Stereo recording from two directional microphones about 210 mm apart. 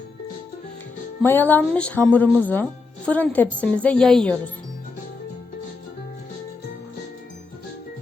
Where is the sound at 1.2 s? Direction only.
10° left (ahead or behind).